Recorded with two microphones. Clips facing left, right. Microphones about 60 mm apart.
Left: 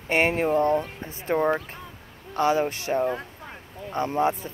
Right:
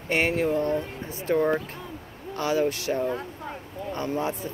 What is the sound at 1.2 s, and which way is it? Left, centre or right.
Speech, centre.